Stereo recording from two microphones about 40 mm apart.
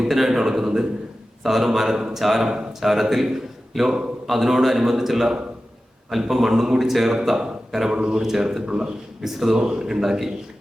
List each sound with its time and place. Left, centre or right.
0.0 s a man's voice: centre
9.2 s speech: centre